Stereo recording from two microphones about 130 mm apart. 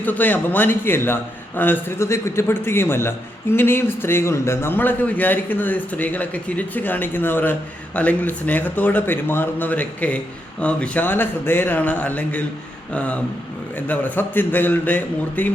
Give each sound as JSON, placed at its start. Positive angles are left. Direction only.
{"t": 0.0, "sound": "a man's voice", "side_deg": 15}